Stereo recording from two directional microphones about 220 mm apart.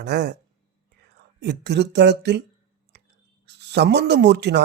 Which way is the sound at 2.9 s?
50° right (ahead or behind).